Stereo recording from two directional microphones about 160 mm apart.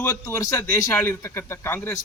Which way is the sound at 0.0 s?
15° left (ahead or behind).